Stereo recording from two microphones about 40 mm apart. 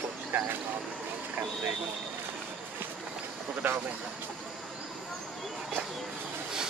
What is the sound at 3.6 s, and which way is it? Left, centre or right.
Speech, right.